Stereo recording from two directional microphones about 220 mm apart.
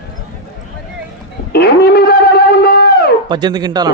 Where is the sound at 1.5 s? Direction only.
45° left (ahead or behind).